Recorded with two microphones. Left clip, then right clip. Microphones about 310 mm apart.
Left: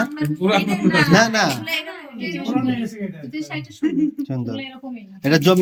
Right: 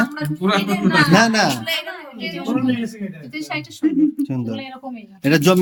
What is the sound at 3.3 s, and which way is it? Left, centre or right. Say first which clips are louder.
Speech: right 5 dB; right.